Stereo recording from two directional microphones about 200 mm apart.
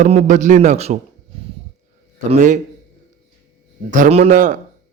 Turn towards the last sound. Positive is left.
turn(degrees=-40)  # may be behind; listen again after turning